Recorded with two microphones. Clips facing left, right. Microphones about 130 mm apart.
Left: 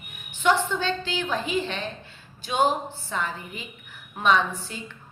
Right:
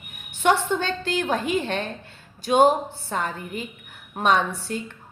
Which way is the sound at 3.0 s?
50° right (ahead or behind).